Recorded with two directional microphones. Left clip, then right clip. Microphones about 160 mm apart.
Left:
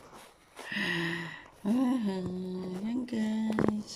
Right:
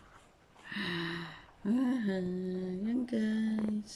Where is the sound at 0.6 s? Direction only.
5° left (ahead or behind).